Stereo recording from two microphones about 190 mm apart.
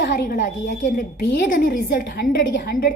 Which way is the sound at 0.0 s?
50° left (ahead or behind).